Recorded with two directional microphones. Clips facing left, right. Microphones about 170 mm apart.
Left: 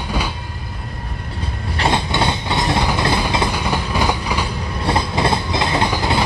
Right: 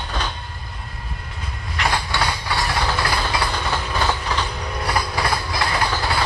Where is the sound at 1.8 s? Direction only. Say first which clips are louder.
Left 4 dB; 25° left (ahead or behind).